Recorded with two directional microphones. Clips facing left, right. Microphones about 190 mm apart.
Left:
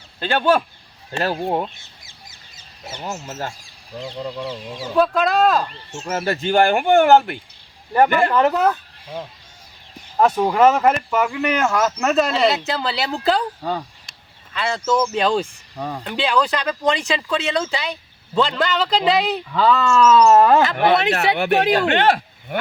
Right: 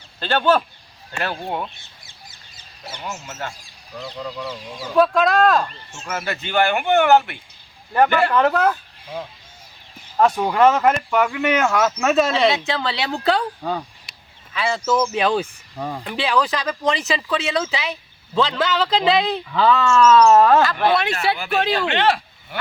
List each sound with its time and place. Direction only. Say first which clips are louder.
0.2 s speech: even; 15° left (ahead or behind)
1.1 s speech: left 5 dB; 40° left (ahead or behind)
3.0 s speech: left 3 dB; 35° left (ahead or behind)
4.9 s speech: right 1 dB; centre (ahead or behind)
6.1 s speech: left 6 dB; 35° left (ahead or behind)
7.1 s speech: left 2 dB; 35° left (ahead or behind)
7.9 s speech: left 1 dB; 10° left (ahead or behind)
10.2 s speech: left 1 dB; 5° left (ahead or behind)
21.3 s speech: left 6 dB; 65° left (ahead or behind)
21.8 s speech: left 2 dB; 50° left (ahead or behind)